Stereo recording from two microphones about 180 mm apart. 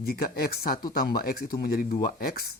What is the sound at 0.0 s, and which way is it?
Speech, 60° left (ahead or behind).